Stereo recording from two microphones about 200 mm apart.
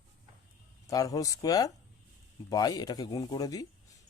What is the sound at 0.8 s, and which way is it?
Speech, 15° left (ahead or behind).